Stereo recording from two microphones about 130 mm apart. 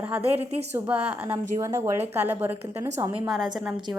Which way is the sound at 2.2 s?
15° right (ahead or behind).